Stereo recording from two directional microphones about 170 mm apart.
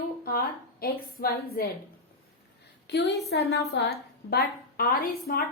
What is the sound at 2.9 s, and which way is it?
A woman's voice, 70° left (ahead or behind).